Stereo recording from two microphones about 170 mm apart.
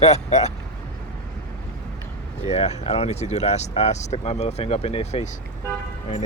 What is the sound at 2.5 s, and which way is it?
Speech, 40° left (ahead or behind).